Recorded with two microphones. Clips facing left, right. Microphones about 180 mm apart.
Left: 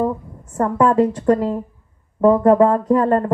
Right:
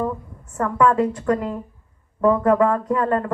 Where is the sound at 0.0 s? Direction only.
35° left (ahead or behind).